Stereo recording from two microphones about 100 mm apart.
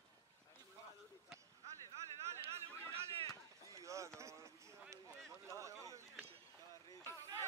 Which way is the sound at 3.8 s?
30° right (ahead or behind).